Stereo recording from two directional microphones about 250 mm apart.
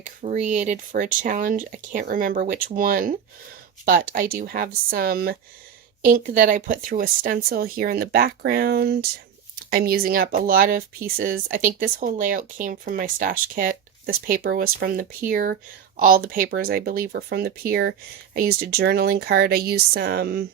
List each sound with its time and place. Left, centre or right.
0.0 s speech: right